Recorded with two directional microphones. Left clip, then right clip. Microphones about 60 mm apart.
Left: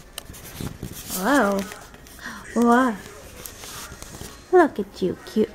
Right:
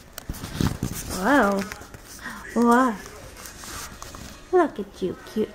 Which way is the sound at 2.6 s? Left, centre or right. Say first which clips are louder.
Left 1 dB; centre.